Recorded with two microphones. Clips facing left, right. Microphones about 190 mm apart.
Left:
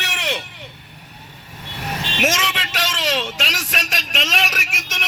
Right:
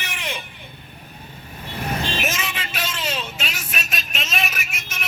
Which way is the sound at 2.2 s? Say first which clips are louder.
Left 5 dB; 90° left.